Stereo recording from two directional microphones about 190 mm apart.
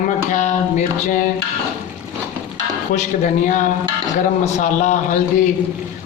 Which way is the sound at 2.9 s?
40° left (ahead or behind).